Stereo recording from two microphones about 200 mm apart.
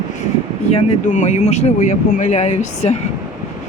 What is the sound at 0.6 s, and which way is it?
Speech, 35° left (ahead or behind).